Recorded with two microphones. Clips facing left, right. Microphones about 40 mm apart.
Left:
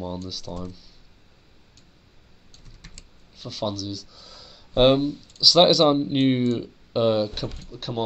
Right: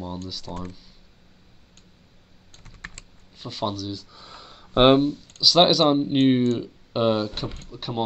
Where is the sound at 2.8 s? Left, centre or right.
Right.